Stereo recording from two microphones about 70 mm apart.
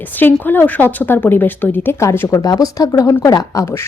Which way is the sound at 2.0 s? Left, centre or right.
Left.